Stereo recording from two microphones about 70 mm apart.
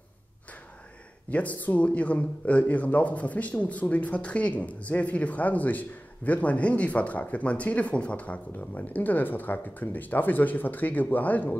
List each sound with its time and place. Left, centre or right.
1.3 s speech: left